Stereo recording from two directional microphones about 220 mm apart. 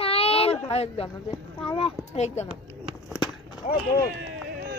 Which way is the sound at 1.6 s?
20° left (ahead or behind).